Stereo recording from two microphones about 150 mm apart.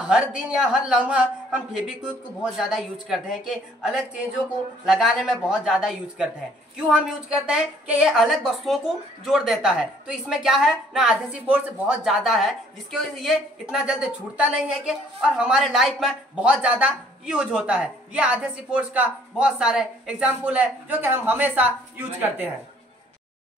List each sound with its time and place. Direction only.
0.0 s a woman's voice: 5° right (ahead or behind)